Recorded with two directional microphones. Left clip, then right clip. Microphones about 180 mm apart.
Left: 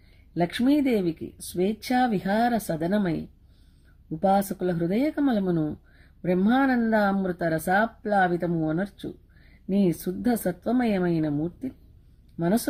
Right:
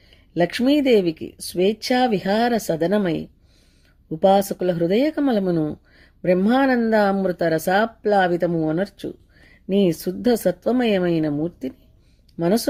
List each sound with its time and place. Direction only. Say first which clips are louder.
0.3 s speech: right 5 dB; 35° right (ahead or behind)
4.2 s speech: right 6 dB; 35° right (ahead or behind)